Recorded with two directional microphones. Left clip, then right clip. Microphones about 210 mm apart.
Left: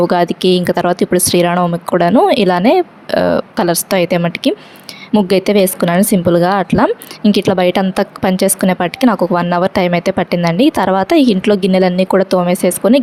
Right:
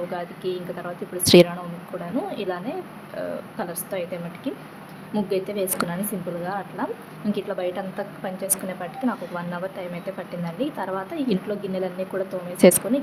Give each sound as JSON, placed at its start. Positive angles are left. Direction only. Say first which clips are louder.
{"t": 0.1, "sound": "a woman's voice", "louder": "left 17 dB", "side_deg": 50}
{"t": 1.2, "sound": "speech", "louder": "left 1 dB", "side_deg": 0}
{"t": 2.0, "sound": "a woman's voice", "louder": "left 19 dB", "side_deg": 50}
{"t": 12.6, "sound": "speech", "louder": "even", "side_deg": 0}